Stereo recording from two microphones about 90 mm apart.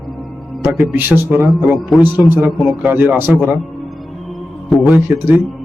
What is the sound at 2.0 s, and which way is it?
Speech, 25° right (ahead or behind).